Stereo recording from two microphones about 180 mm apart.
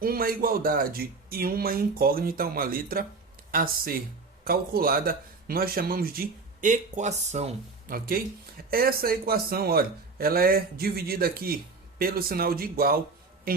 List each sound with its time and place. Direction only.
0.0 s speech: 55° right (ahead or behind)